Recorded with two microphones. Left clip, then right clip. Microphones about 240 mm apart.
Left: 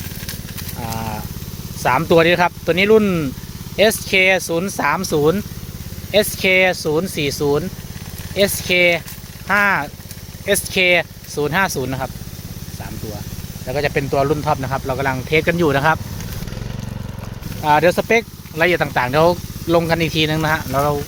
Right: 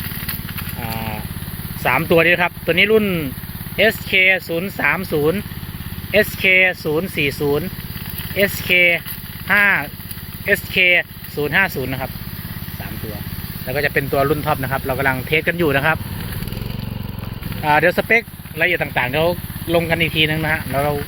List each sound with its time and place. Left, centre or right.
0.8 s vehicle: centre
1.8 s speech: centre
13.7 s speech: centre
17.6 s speech: centre
18.5 s speech: left